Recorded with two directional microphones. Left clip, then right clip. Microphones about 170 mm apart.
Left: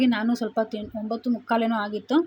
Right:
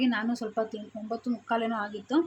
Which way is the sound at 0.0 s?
20° left (ahead or behind).